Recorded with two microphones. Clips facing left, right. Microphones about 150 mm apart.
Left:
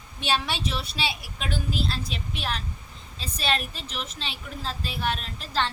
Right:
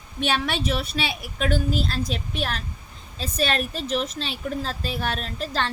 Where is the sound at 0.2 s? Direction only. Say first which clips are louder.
Right 3 dB; 55° right (ahead or behind).